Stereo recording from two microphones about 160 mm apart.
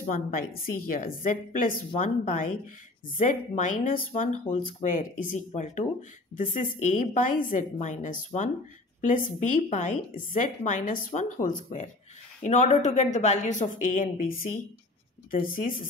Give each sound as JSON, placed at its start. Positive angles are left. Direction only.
{"t": 0.0, "sound": "a woman's voice", "side_deg": 60}
{"t": 4.6, "sound": "speech", "side_deg": 30}
{"t": 4.8, "sound": "a woman's voice", "side_deg": 55}